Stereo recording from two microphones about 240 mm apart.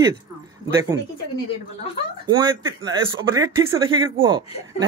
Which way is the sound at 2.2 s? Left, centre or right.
Centre.